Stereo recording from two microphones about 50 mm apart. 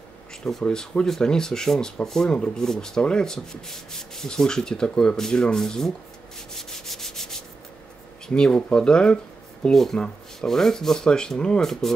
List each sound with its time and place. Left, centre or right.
0.4 s speech: centre
0.7 s sanding: centre
6.5 s rub: centre
8.3 s sanding: centre
8.7 s speech: centre
9.9 s sanding: centre